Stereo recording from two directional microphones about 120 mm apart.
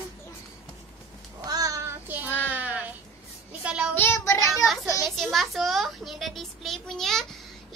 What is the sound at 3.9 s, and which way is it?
Child singing, 20° left (ahead or behind).